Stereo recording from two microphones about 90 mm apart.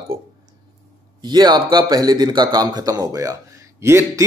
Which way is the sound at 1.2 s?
55° right (ahead or behind).